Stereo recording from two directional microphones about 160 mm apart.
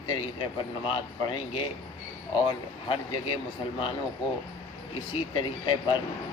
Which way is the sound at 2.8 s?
30° left (ahead or behind).